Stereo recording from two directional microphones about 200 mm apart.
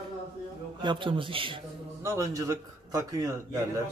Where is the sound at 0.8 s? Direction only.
25° right (ahead or behind).